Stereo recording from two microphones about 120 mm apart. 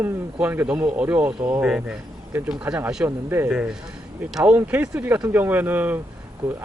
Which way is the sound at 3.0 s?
20° right (ahead or behind).